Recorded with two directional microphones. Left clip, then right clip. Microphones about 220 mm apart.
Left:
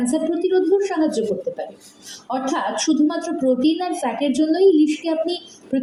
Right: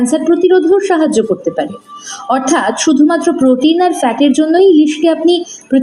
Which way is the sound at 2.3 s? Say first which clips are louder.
Right 10 dB; 50° right (ahead or behind).